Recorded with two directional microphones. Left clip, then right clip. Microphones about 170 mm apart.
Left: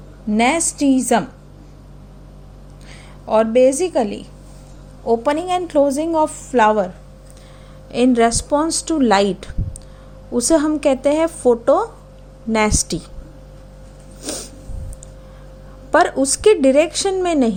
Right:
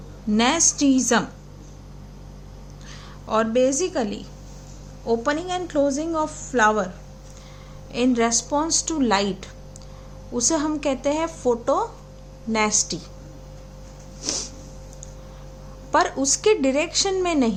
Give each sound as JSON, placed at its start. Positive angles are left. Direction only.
{"t": 0.3, "sound": "a woman's voice", "side_deg": 20}
{"t": 3.2, "sound": "a woman's voice", "side_deg": 25}
{"t": 14.2, "sound": "a sound", "side_deg": 20}
{"t": 15.9, "sound": "a woman's voice", "side_deg": 30}